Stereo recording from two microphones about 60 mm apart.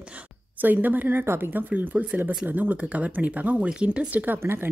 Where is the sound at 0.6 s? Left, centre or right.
Right.